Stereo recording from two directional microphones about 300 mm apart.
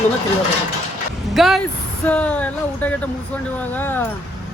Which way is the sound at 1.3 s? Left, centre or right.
Centre.